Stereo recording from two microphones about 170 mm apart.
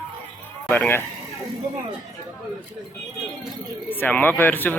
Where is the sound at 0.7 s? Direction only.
10° left (ahead or behind).